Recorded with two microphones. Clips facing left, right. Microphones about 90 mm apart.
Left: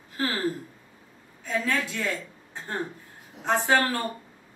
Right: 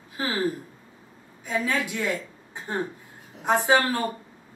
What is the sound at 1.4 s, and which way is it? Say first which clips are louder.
A woman's voice: right 1 dB; 15° right (ahead or behind).